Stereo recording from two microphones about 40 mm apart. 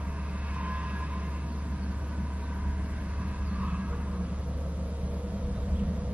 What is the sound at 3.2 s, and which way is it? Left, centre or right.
Vehicle, right.